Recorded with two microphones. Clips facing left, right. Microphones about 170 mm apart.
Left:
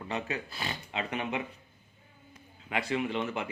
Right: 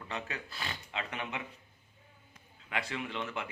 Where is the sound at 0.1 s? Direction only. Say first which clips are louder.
Left 5 dB; 15° left (ahead or behind).